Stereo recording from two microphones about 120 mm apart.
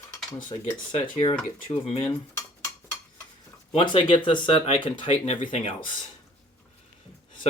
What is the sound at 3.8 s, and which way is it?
Speech, 45° left (ahead or behind).